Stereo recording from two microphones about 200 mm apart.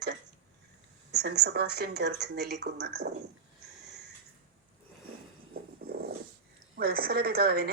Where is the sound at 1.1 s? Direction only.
55° right (ahead or behind).